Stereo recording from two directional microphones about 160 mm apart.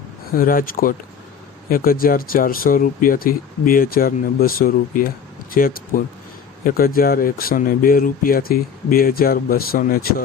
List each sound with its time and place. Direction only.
0.3 s speech: 60° left (ahead or behind)